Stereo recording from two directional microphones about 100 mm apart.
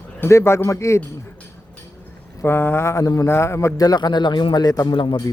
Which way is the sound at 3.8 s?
40° left (ahead or behind).